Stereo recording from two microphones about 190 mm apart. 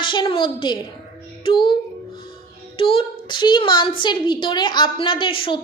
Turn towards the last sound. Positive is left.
turn(degrees=30)  # may be behind; listen again after turning